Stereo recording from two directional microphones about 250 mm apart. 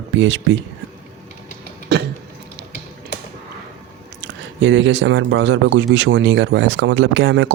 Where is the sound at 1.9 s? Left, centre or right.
Right.